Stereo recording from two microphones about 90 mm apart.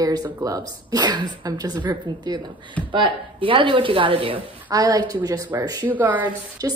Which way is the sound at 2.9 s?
70° right (ahead or behind).